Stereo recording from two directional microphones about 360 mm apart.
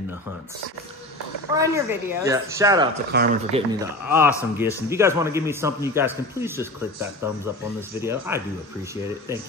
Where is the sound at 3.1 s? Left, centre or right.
Right.